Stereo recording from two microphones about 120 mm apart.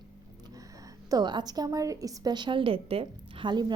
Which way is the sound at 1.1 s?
35° right (ahead or behind).